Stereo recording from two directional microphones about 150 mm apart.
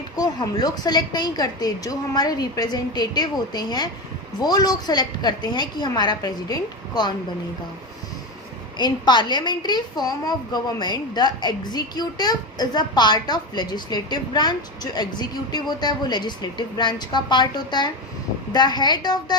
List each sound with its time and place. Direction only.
0.2 s a woman's voice: 30° left (ahead or behind)
8.8 s a woman's voice: 30° left (ahead or behind)
15.5 s a woman's voice: 30° left (ahead or behind)